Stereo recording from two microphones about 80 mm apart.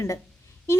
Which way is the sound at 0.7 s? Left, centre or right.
Left.